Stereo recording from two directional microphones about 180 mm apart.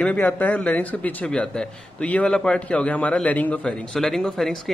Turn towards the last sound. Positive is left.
turn(degrees=0)  # may be behind; listen again after turning